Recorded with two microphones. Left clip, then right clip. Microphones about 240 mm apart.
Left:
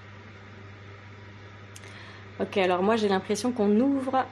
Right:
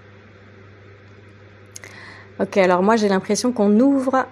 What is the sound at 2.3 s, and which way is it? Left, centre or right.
A woman's voice, right.